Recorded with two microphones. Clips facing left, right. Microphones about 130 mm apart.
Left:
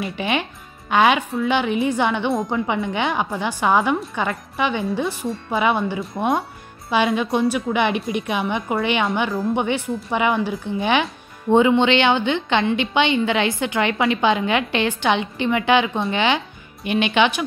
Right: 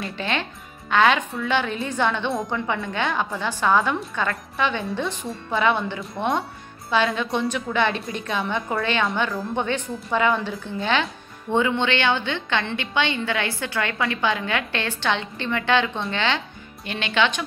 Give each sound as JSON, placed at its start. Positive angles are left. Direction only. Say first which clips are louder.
{"t": 0.0, "sound": "a woman's voice", "louder": "left 4 dB", "side_deg": 15}